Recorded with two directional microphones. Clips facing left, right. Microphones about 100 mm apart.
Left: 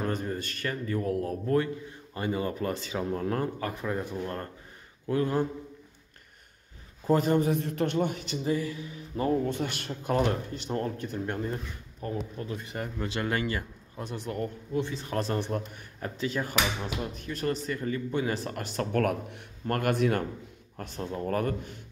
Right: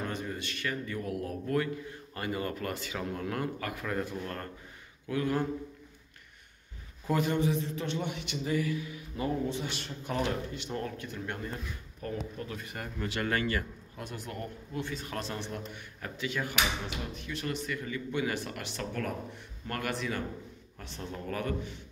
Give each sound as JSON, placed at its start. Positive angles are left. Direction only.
{"t": 0.0, "sound": "a man's voice", "side_deg": 40}
{"t": 7.1, "sound": "a man's voice", "side_deg": 40}
{"t": 9.5, "sound": "a man's voice", "side_deg": 55}
{"t": 15.1, "sound": "a man's voice", "side_deg": 45}
{"t": 18.9, "sound": "speech", "side_deg": 65}
{"t": 19.6, "sound": "speech", "side_deg": 45}